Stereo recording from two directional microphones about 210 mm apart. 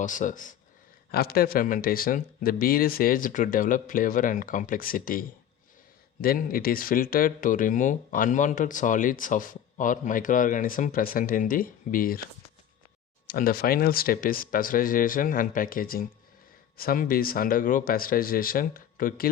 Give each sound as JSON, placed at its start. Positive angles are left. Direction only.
{"t": 0.0, "sound": "speech", "side_deg": 40}
{"t": 6.2, "sound": "speech", "side_deg": 45}
{"t": 13.2, "sound": "speech", "side_deg": 45}